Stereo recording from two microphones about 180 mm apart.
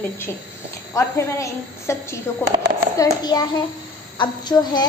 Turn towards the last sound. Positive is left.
turn(degrees=25)  # may be behind; listen again after turning